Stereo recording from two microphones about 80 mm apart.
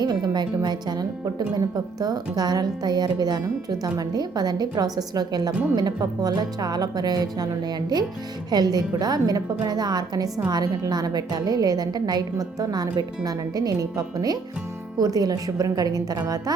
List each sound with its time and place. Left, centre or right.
0.0 s a woman's voice: right
8.4 s a woman's voice: right